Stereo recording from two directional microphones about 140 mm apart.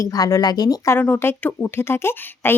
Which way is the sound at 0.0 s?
25° left (ahead or behind).